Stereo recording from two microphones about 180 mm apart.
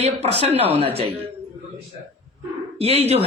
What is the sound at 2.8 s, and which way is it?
Speech, 35° right (ahead or behind).